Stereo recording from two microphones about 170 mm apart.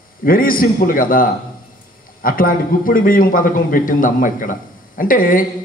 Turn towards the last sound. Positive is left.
turn(degrees=55)  # may be behind; listen again after turning